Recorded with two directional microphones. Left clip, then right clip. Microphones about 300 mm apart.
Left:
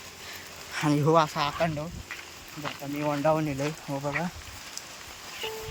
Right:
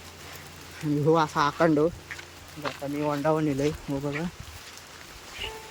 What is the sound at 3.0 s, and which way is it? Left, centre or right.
Speech, centre.